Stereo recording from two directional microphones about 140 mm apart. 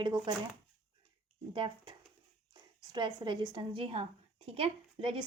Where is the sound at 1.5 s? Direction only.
35° right (ahead or behind).